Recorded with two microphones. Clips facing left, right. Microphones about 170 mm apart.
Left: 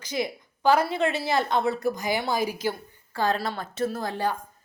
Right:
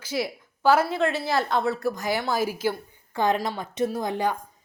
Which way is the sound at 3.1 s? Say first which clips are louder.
Right 2 dB; 20° right (ahead or behind).